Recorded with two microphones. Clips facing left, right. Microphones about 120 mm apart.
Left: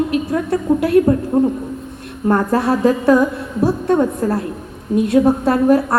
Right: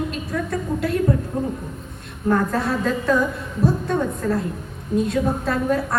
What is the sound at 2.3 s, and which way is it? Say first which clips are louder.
Speech: left 4 dB; 30° left (ahead or behind).